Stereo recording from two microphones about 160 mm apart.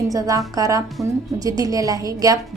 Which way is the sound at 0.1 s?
20° right (ahead or behind).